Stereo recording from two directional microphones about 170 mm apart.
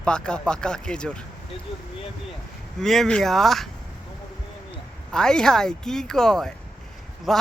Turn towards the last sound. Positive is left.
turn(degrees=0)  # may be behind; listen again after turning